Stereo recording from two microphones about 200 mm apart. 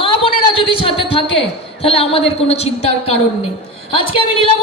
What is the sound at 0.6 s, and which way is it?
A woman's voice, 25° left (ahead or behind).